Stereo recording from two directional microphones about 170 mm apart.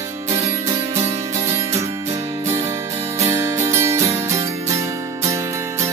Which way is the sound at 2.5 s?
15° right (ahead or behind).